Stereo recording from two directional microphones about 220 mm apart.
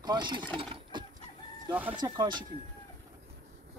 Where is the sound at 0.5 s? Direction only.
20° right (ahead or behind).